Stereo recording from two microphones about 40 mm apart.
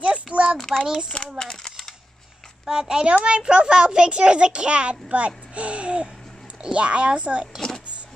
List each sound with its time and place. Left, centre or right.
0.0 s a sound: right
0.6 s child singing: centre
1.4 s speech: centre
2.7 s a child's voice: centre